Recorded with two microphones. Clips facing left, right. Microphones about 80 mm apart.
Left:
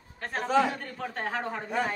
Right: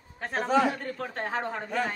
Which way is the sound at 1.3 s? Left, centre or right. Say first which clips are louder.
Right 1 dB; centre.